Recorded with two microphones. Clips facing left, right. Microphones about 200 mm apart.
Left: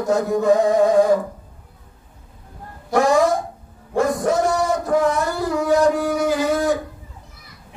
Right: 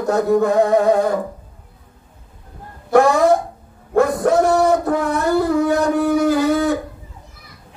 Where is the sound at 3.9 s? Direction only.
60° right (ahead or behind).